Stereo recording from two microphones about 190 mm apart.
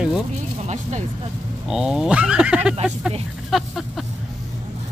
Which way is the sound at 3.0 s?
Centre (ahead or behind).